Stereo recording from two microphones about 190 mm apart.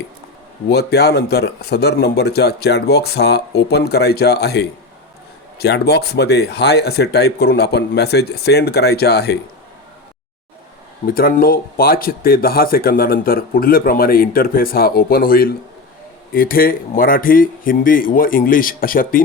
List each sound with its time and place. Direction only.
0.7 s a man's voice: 60° left (ahead or behind)
11.0 s speech: 50° left (ahead or behind)